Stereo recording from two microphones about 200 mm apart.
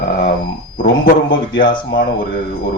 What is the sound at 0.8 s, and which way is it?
Speech, 50° left (ahead or behind).